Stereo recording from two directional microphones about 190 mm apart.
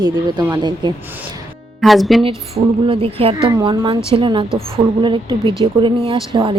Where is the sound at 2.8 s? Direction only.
30° right (ahead or behind).